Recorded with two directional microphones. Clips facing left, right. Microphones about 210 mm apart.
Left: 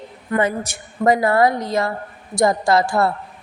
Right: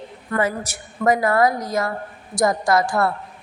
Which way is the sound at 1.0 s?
25° left (ahead or behind).